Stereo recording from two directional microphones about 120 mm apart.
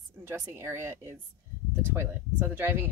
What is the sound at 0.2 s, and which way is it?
Speech, 20° right (ahead or behind).